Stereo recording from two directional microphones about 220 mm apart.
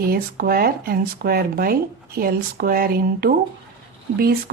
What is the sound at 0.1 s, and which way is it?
Speech, 40° right (ahead or behind).